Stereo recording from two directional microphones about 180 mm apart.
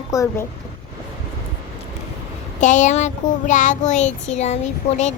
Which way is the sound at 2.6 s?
45° left (ahead or behind).